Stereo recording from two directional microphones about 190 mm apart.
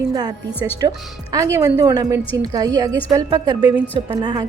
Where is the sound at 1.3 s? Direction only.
15° right (ahead or behind).